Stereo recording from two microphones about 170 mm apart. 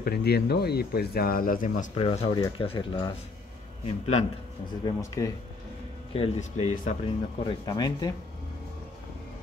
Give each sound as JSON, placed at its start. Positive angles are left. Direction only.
{"t": 0.0, "sound": "speech", "side_deg": 70}
{"t": 2.0, "sound": "speech", "side_deg": 30}
{"t": 4.8, "sound": "speech", "side_deg": 20}
{"t": 6.1, "sound": "speech", "side_deg": 35}
{"t": 6.7, "sound": "speech", "side_deg": 50}
{"t": 7.3, "sound": "speech", "side_deg": 25}